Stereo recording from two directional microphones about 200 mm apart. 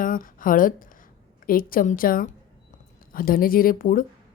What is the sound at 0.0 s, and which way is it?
A woman's voice, 45° left (ahead or behind).